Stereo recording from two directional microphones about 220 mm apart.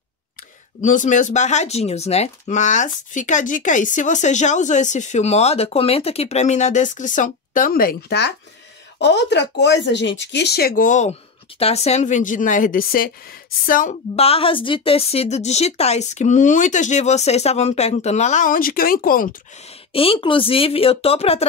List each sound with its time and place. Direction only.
0.7 s speech: 35° left (ahead or behind)
19.9 s speech: 25° left (ahead or behind)